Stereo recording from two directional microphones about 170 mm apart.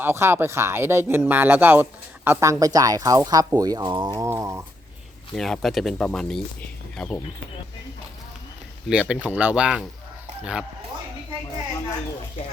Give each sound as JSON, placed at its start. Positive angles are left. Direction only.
{"t": 0.0, "sound": "speech", "side_deg": -15}
{"t": 5.3, "sound": "speech", "side_deg": 0}
{"t": 8.9, "sound": "speech", "side_deg": -5}